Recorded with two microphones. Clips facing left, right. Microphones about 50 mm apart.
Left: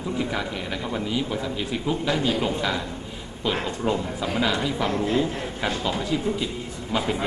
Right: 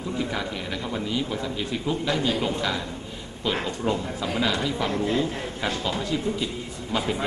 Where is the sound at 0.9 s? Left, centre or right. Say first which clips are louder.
Left 1 dB; centre.